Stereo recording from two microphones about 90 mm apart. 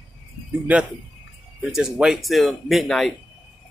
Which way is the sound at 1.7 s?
5° right (ahead or behind).